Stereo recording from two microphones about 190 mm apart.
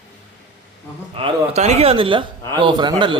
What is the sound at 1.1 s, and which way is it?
A man's voice, 30° right (ahead or behind).